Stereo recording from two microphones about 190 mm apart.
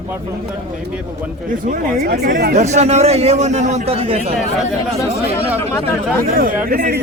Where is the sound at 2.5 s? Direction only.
35° right (ahead or behind).